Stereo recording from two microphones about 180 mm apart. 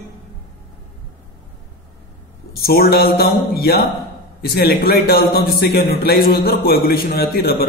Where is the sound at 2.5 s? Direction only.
55° left (ahead or behind).